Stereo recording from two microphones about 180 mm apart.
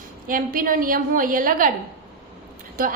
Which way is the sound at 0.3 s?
50° right (ahead or behind).